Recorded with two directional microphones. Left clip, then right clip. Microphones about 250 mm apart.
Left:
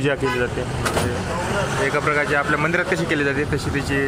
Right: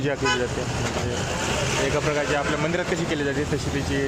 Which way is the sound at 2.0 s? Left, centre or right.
Centre.